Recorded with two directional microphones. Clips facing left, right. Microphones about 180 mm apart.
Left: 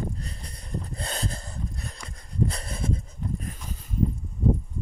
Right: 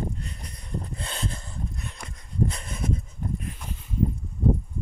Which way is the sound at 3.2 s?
50° right (ahead or behind).